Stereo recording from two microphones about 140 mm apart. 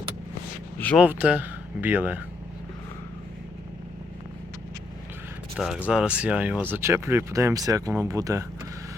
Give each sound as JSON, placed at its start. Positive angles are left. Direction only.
{"t": 0.9, "sound": "speech", "side_deg": -10}
{"t": 5.5, "sound": "speech", "side_deg": -5}